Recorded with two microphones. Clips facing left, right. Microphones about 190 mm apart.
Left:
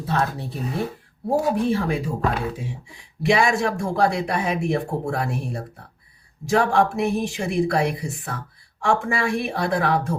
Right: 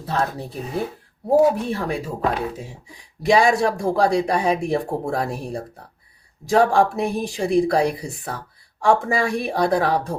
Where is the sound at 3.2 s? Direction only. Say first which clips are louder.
Right 3 dB; 35° right (ahead or behind).